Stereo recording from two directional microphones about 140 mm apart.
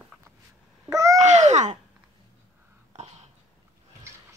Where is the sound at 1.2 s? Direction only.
55° right (ahead or behind).